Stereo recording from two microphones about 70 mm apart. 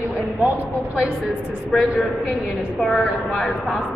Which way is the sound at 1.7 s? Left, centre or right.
Centre.